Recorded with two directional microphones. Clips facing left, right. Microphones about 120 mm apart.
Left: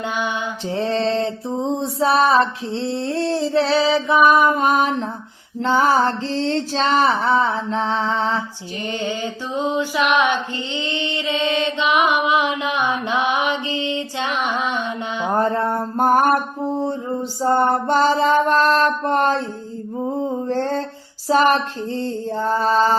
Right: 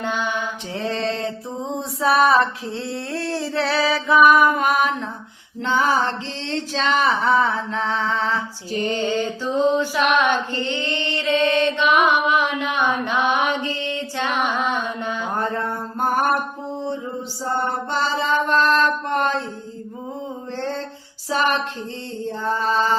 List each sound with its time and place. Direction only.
0.0 s mantra: 15° left (ahead or behind)
0.7 s a sound: 30° left (ahead or behind)
5.5 s female singing: 40° left (ahead or behind)
9.0 s mantra: 15° left (ahead or behind)
15.3 s female singing: 35° left (ahead or behind)
17.4 s music: 50° left (ahead or behind)
20.5 s music: 45° left (ahead or behind)
21.2 s female singing: 40° left (ahead or behind)